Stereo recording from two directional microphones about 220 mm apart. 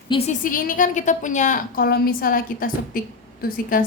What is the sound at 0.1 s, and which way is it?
Speech, 20° left (ahead or behind).